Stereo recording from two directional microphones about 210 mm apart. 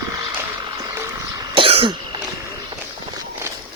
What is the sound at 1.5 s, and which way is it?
Cough, 25° right (ahead or behind).